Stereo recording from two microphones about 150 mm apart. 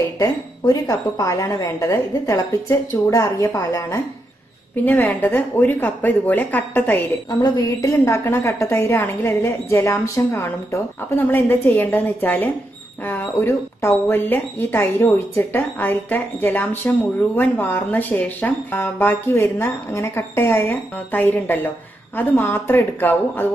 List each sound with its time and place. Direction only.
0.2 s a woman's voice: 25° left (ahead or behind)
7.2 s a woman's voice: 25° left (ahead or behind)